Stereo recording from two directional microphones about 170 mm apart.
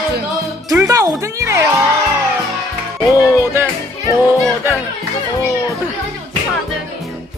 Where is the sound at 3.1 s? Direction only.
15° right (ahead or behind).